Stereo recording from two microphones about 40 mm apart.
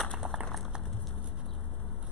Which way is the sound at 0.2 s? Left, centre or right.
Right.